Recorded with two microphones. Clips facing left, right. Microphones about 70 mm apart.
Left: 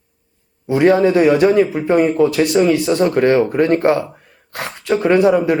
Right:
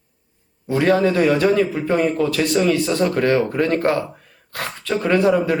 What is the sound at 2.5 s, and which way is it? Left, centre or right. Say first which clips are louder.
Speech: left 2 dB; centre.